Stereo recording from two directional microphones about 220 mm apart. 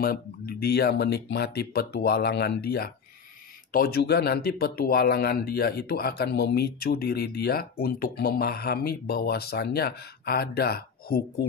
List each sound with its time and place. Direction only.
0.0 s speech: 45° left (ahead or behind)